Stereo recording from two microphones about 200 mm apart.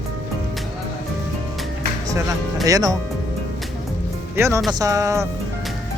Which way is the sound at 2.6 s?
15° right (ahead or behind).